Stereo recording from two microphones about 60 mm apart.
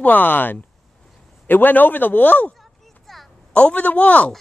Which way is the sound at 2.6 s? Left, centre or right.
Centre.